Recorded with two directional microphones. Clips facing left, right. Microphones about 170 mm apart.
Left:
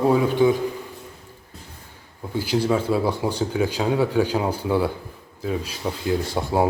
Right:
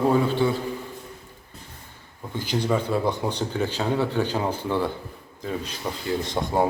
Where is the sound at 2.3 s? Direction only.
10° left (ahead or behind).